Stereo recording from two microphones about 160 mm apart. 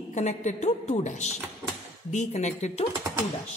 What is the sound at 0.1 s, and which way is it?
A woman's voice, 45° left (ahead or behind).